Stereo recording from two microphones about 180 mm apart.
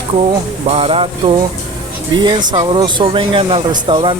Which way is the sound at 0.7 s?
30° right (ahead or behind).